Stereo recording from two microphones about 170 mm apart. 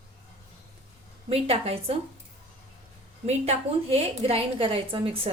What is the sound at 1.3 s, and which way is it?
Speech, 35° right (ahead or behind).